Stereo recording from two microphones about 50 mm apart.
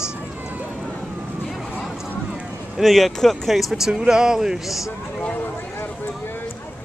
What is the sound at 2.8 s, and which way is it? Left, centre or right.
Speech, centre.